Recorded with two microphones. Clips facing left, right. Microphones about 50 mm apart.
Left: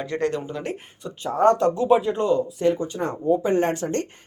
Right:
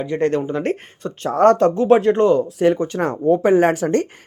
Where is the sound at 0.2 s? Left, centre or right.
Right.